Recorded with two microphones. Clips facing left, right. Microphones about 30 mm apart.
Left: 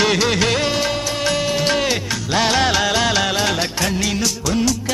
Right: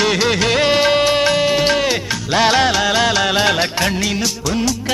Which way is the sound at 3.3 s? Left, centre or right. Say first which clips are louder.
Right 4 dB; centre.